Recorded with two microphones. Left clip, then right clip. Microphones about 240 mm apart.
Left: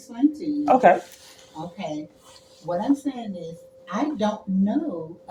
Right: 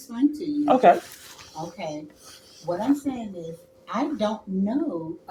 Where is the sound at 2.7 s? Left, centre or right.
Centre.